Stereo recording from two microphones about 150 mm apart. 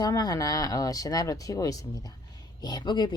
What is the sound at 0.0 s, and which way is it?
Speech, 25° left (ahead or behind).